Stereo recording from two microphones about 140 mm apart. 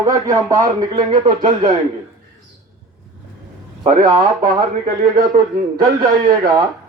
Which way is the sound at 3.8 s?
60° right (ahead or behind).